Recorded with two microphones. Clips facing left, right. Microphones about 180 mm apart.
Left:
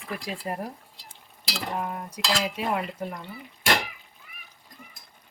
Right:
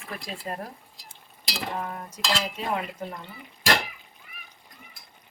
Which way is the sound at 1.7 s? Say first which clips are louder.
Left 3 dB; 5° left (ahead or behind).